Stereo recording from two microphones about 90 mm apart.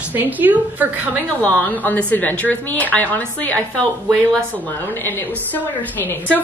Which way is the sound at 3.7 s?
10° left (ahead or behind).